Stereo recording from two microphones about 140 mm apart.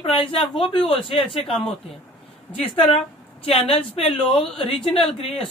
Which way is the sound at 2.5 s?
40° left (ahead or behind).